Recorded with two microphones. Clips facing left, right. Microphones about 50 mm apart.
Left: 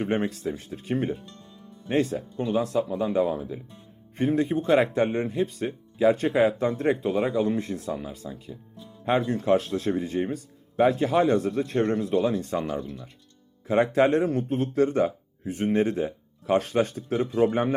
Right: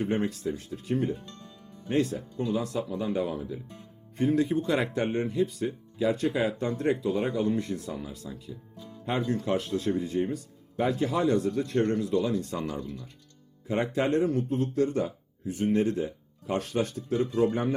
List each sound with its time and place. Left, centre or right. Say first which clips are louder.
0.0 s a man's voice: left 2 dB; left
4.2 s a man's voice: left 1 dB; left
7.5 s a man's voice: left 2 dB; left
12.6 s speech: left 4 dB; left
13.7 s a man's voice: left 5 dB; left